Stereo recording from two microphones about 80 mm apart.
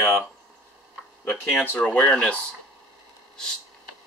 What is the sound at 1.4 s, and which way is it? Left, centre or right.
Speech, left.